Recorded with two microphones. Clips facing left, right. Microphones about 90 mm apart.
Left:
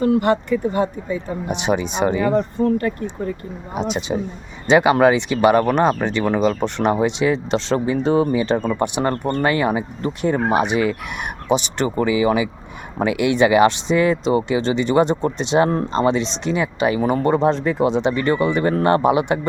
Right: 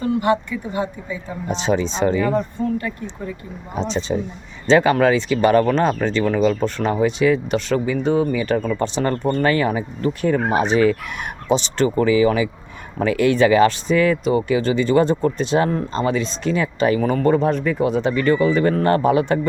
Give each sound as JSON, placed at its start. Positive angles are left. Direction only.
{"t": 0.5, "sound": "speech", "side_deg": 50}
{"t": 1.5, "sound": "chicken", "side_deg": 15}
{"t": 2.7, "sound": "speech", "side_deg": 50}
{"t": 3.8, "sound": "chicken", "side_deg": 10}
{"t": 6.0, "sound": "speech", "side_deg": 20}
{"t": 9.4, "sound": "chicken", "side_deg": 20}
{"t": 13.0, "sound": "speech", "side_deg": 15}